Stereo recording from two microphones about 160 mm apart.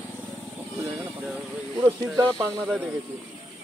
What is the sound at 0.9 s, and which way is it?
Speech, centre (ahead or behind).